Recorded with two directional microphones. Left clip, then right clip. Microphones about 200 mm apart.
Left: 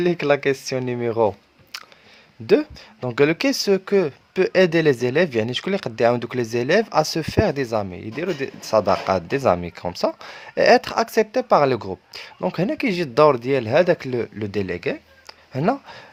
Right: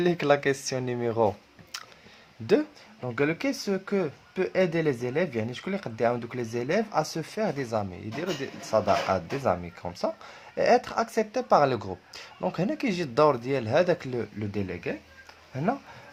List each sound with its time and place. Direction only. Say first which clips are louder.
0.0 s speech: left 4 dB; 20° left (ahead or behind)
1.7 s a sound: left 4 dB; 25° left (ahead or behind)
2.5 s speech: left 6 dB; 30° left (ahead or behind)
3.0 s speech: left 9 dB; 45° left (ahead or behind)
14.3 s speech: left 8 dB; 50° left (ahead or behind)